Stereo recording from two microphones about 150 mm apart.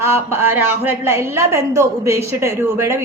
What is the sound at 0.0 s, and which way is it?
A woman's voice, 15° right (ahead or behind).